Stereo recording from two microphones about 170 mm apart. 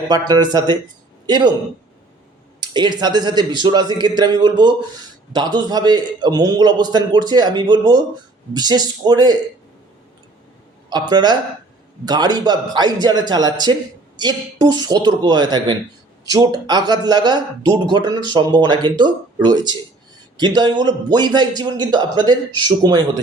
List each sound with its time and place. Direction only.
0.1 s a man's voice: 25° right (ahead or behind)
2.6 s a man's voice: 25° right (ahead or behind)
10.8 s a man's voice: 25° right (ahead or behind)